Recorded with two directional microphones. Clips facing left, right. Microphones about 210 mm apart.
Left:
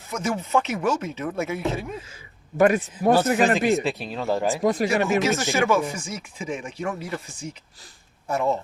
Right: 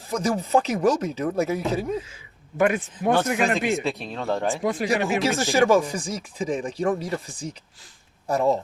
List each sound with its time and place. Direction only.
0.1 s speech: 35° right (ahead or behind)
2.6 s speech: 40° left (ahead or behind)
3.8 s speech: centre (ahead or behind)
4.6 s speech: 40° left (ahead or behind)
5.4 s speech: 30° right (ahead or behind)